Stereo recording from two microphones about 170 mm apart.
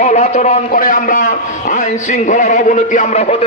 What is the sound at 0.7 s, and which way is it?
A man's voice, 50° left (ahead or behind).